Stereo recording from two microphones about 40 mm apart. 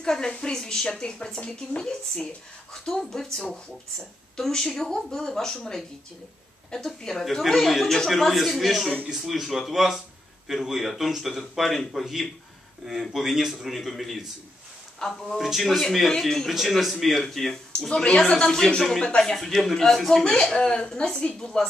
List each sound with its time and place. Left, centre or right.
0.0 s speech: centre
6.9 s speech: centre
12.8 s speech: centre
15.0 s speech: centre
15.3 s speech: centre
16.2 s speech: centre
17.8 s speech: centre